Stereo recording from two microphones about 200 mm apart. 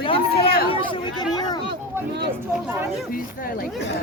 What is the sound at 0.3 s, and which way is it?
Speech, 50° left (ahead or behind).